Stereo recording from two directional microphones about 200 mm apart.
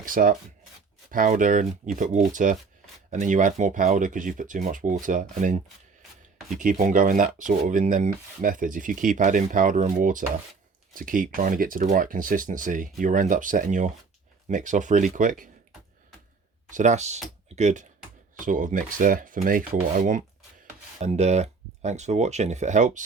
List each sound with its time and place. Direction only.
0.0 s speech: 45° right (ahead or behind)
6.6 s speech: 40° right (ahead or behind)
16.6 s speech: 40° right (ahead or behind)